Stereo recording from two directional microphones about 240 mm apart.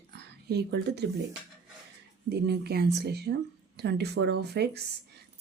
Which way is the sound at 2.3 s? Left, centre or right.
Right.